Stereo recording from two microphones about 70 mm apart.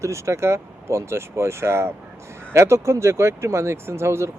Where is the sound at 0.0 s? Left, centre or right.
Right.